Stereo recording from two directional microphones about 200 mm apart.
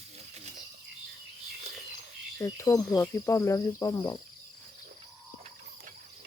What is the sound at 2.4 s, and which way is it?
Speech, 15° left (ahead or behind).